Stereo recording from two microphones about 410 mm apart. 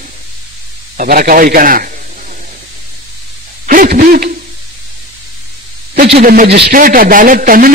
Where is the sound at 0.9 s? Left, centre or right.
Right.